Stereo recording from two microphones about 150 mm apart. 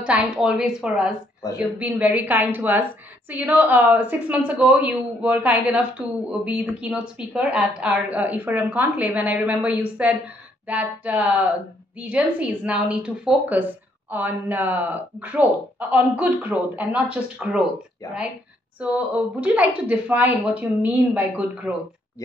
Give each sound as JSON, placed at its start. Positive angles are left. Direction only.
{"t": 0.0, "sound": "a woman's voice", "side_deg": -5}
{"t": 1.4, "sound": "a woman's voice", "side_deg": 25}
{"t": 1.8, "sound": "a woman's voice", "side_deg": -10}
{"t": 18.8, "sound": "a woman's voice", "side_deg": -10}